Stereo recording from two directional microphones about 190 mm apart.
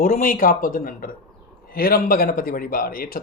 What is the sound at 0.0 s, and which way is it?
A man's voice, 45° left (ahead or behind).